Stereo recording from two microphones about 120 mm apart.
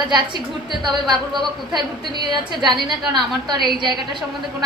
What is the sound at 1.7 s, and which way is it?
A woman's voice, 40° right (ahead or behind).